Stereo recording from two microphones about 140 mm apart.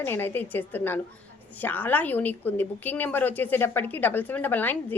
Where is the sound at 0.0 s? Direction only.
15° left (ahead or behind).